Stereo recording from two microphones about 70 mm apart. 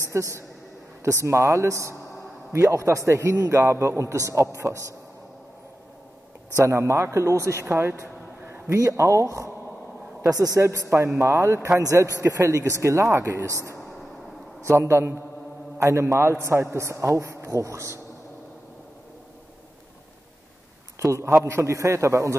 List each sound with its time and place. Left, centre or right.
0.1 s a man's voice: right
6.6 s a man's voice: right
8.7 s a man's voice: right
10.2 s a man's voice: right
10.6 s a man's voice: right
14.7 s a man's voice: right
21.0 s a man's voice: right